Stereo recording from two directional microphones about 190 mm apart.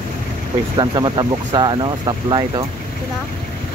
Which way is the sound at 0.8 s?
20° right (ahead or behind).